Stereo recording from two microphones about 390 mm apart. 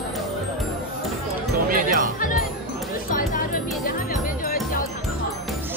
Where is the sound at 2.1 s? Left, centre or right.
Left.